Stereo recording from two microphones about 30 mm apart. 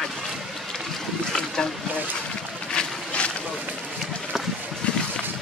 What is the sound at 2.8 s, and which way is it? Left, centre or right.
Boat, left.